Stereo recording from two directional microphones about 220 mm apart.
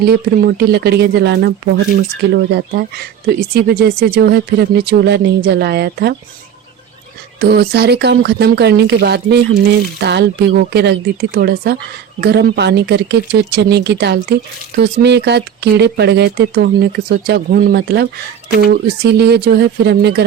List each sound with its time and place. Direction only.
0.0 s speech: 45° right (ahead or behind)
7.3 s speech: 45° right (ahead or behind)